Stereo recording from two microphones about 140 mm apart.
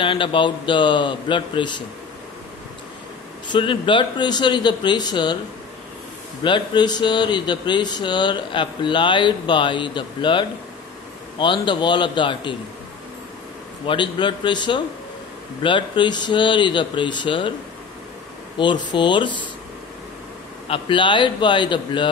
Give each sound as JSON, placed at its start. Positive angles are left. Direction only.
{"t": 0.0, "sound": "speech", "side_deg": 40}
{"t": 3.4, "sound": "speech", "side_deg": 35}
{"t": 6.4, "sound": "speech", "side_deg": 35}
{"t": 13.8, "sound": "speech", "side_deg": 35}
{"t": 18.6, "sound": "speech", "side_deg": 35}
{"t": 20.6, "sound": "speech", "side_deg": 40}